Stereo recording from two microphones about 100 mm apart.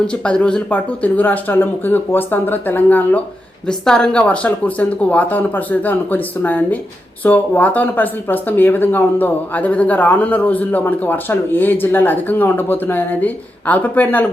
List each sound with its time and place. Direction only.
0.1 s speech: 10° left (ahead or behind)
3.7 s speech: 5° left (ahead or behind)